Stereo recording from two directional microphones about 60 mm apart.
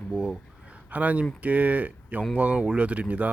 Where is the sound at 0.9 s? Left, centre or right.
Right.